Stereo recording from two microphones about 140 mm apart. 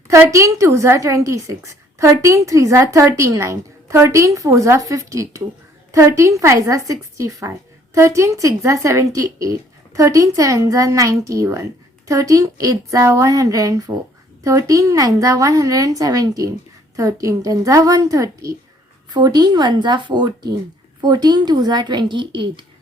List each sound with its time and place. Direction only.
0.1 s a woman's voice: 20° right (ahead or behind)